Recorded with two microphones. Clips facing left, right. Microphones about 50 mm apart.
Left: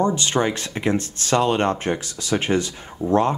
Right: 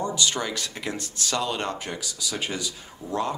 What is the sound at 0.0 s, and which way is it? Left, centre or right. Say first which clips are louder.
Speech: left 7 dB; left.